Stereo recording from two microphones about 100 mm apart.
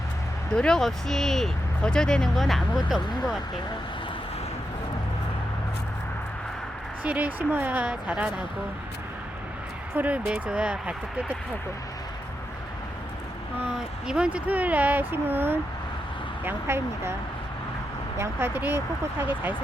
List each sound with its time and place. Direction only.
0.5 s speech: 5° left (ahead or behind)
7.0 s speech: 15° right (ahead or behind)
9.9 s speech: 15° right (ahead or behind)
13.7 s speech: 5° right (ahead or behind); by 17.2 s 25° right (ahead or behind)
18.2 s speech: 25° right (ahead or behind)